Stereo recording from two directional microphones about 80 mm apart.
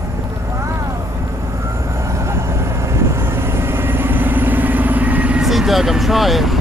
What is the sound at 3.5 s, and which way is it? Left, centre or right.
Vehicle, right.